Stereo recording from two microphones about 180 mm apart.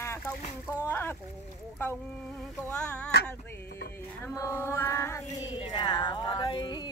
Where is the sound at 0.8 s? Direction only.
10° left (ahead or behind).